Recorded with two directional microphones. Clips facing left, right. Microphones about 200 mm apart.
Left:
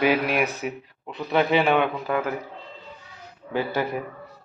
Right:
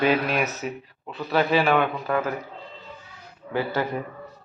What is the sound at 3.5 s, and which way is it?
Speech, 15° left (ahead or behind).